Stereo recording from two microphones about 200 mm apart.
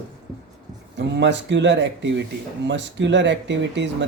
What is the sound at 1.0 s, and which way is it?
Speech, 60° right (ahead or behind).